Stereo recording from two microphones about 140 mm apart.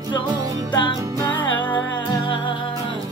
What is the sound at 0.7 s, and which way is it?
Music, 35° left (ahead or behind).